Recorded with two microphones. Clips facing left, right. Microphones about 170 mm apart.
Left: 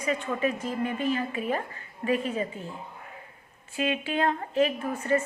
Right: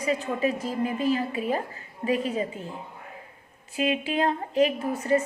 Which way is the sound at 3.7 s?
35° right (ahead or behind).